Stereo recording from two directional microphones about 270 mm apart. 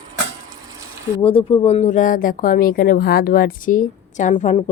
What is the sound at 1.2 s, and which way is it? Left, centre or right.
Speech, centre.